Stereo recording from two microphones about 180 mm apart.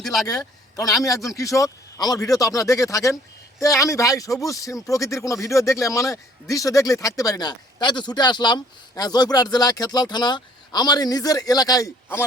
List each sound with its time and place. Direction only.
0.0 s a man's voice: centre (ahead or behind)
0.3 s a man's voice: 20° left (ahead or behind)